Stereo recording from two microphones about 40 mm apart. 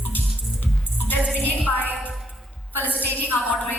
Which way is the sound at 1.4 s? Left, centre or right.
Left.